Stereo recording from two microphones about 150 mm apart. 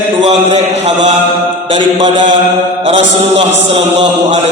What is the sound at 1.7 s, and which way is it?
A man's voice, 30° right (ahead or behind).